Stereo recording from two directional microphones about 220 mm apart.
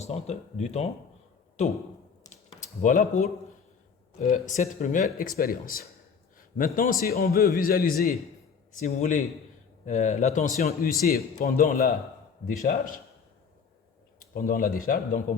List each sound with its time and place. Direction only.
0.0 s speech: 30° left (ahead or behind)
2.8 s a man's voice: 40° left (ahead or behind)
14.2 s speech: 40° left (ahead or behind)